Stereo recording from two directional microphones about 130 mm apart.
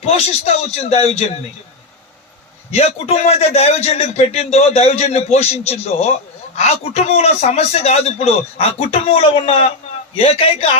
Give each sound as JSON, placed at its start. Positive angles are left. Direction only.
{"t": 0.0, "sound": "a man's voice", "side_deg": 55}
{"t": 2.7, "sound": "a man's voice", "side_deg": 55}